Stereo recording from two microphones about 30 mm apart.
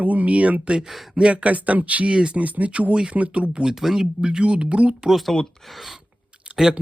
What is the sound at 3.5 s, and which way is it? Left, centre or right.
Speech, right.